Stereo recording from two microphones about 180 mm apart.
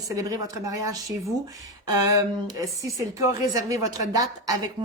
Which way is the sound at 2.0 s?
20° right (ahead or behind).